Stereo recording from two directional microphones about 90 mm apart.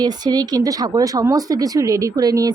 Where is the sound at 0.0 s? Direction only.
45° right (ahead or behind).